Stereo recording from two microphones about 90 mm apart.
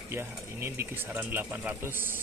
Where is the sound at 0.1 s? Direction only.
30° right (ahead or behind).